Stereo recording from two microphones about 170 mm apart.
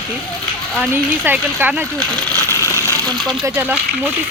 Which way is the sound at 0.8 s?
10° right (ahead or behind).